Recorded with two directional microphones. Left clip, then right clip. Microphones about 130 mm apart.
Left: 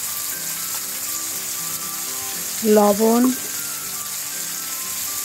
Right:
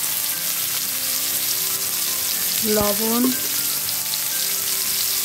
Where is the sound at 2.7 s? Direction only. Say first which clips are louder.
Left 8 dB; 15° left (ahead or behind).